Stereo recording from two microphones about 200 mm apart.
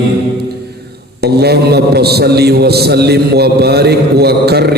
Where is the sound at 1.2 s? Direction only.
55° right (ahead or behind).